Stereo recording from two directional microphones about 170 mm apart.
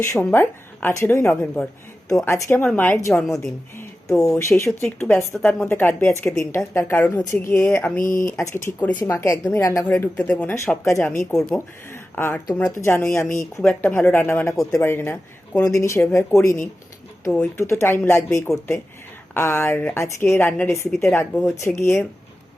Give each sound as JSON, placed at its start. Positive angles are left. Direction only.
{"t": 0.0, "sound": "a woman's voice", "side_deg": 15}
{"t": 7.9, "sound": "speech", "side_deg": 55}
{"t": 8.5, "sound": "a woman's voice", "side_deg": 10}
{"t": 11.3, "sound": "speech", "side_deg": 0}
{"t": 11.5, "sound": "a woman's voice", "side_deg": 15}
{"t": 17.2, "sound": "a woman's voice", "side_deg": 10}